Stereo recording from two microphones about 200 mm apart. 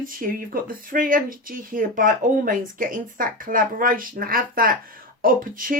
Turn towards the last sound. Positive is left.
turn(degrees=-45)  # may be behind; listen again after turning